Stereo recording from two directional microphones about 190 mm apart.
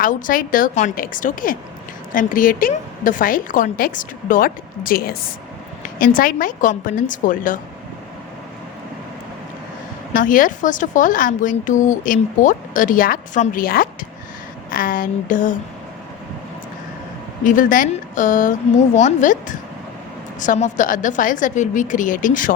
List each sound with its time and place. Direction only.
0.0 s speech: 45° left (ahead or behind)
6.1 s speech: 45° left (ahead or behind)
10.2 s speech: 45° left (ahead or behind)
17.4 s speech: 45° left (ahead or behind)